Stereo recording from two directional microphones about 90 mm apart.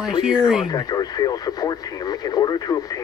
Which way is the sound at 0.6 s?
45° left (ahead or behind).